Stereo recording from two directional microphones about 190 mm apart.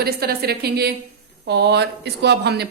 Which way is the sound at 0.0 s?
55° right (ahead or behind).